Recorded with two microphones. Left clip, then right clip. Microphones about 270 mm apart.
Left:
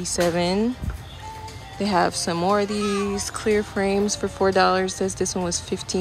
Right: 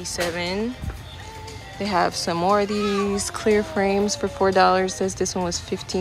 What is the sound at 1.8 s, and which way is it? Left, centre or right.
A woman's voice, centre.